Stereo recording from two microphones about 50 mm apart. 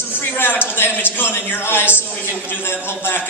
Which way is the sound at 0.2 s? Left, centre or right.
Left.